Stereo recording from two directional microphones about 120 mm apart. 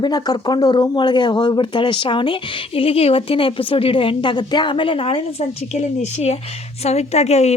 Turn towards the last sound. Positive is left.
turn(degrees=65)  # may be behind; listen again after turning